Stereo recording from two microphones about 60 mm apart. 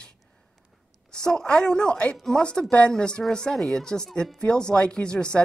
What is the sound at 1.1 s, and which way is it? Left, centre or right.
Speech, centre.